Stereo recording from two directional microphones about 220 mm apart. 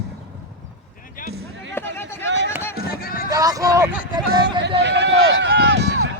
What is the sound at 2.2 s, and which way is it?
Run, 55° right (ahead or behind).